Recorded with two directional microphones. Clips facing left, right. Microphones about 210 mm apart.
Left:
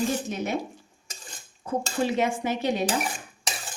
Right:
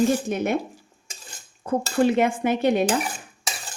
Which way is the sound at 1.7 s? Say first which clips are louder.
Right 6 dB; 55° right (ahead or behind).